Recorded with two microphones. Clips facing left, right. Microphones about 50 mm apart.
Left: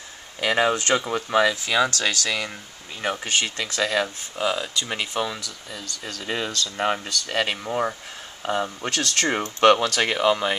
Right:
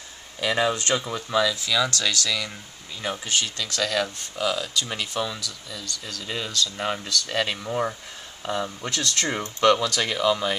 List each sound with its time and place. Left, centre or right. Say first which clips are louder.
0.4 s speech: left 2 dB; left
7.5 s speech: left 1 dB; centre
8.4 s speech: left 3 dB; left
8.9 s speech: left 3 dB; left
9.3 s speech: left 3 dB; left